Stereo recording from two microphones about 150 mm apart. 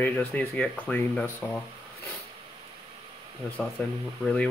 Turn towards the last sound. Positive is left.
turn(degrees=5)  # may be behind; listen again after turning